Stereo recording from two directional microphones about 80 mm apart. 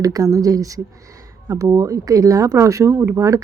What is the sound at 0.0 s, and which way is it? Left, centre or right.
A woman's voice, right.